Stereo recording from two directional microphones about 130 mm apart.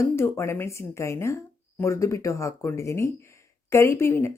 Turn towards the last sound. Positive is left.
turn(degrees=20)  # may be behind; listen again after turning